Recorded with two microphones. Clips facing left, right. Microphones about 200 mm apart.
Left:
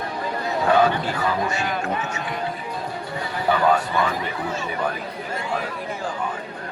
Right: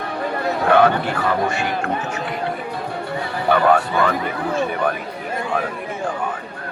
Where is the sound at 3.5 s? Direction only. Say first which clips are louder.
Right 4 dB; 60° right (ahead or behind).